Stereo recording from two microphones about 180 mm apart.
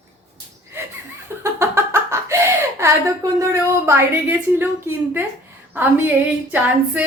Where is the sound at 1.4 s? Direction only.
15° right (ahead or behind).